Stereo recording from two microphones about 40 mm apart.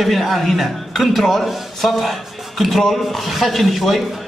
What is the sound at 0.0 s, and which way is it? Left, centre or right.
A man's voice, centre.